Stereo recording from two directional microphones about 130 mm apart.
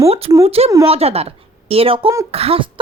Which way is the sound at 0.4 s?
50° right (ahead or behind).